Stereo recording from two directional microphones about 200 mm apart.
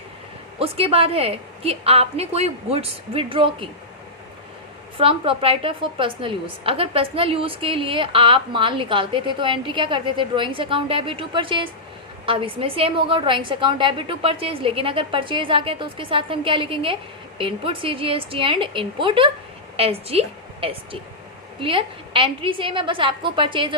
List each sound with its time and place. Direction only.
0.6 s a woman's voice: 30° right (ahead or behind)
4.9 s a woman's voice: 25° right (ahead or behind)